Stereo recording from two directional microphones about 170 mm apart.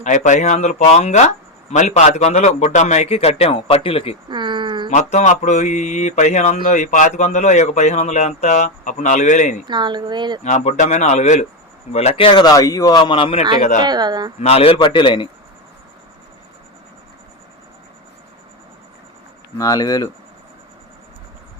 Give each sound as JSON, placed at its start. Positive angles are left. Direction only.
{"t": 0.0, "sound": "a man's voice", "side_deg": 45}
{"t": 4.3, "sound": "speech", "side_deg": -25}
{"t": 4.9, "sound": "speech", "side_deg": 45}
{"t": 9.6, "sound": "speech", "side_deg": -25}
{"t": 10.4, "sound": "speech", "side_deg": 45}
{"t": 13.6, "sound": "speech", "side_deg": 50}
{"t": 13.8, "sound": "speech", "side_deg": -25}
{"t": 14.4, "sound": "a man's voice", "side_deg": 35}
{"t": 19.5, "sound": "speech", "side_deg": 20}